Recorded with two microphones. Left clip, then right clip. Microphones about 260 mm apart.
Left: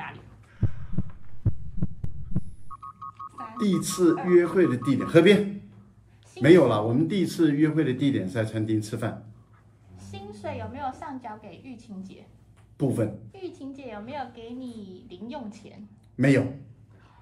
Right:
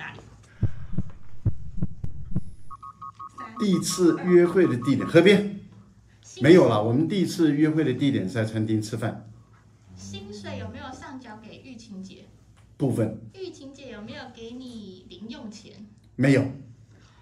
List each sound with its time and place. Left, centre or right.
0.6 s heart sounds: centre
3.5 s a man's voice: centre
6.4 s a man's voice: centre
10.1 s a sound: centre
12.7 s speech: centre
13.3 s a sound: centre
16.2 s a man's voice: centre